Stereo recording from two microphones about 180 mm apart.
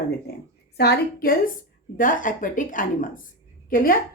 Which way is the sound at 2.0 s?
50° left (ahead or behind).